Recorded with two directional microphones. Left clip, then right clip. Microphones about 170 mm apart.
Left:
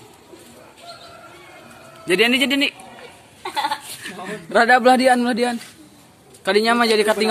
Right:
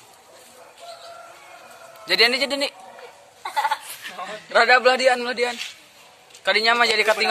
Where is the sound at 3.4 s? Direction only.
50° left (ahead or behind).